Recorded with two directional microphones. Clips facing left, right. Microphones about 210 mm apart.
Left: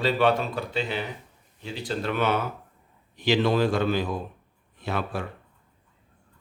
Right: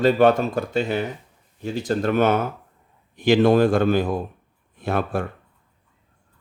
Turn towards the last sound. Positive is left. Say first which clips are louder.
# right 6 dB
turn(degrees=-50)  # may be behind; listen again after turning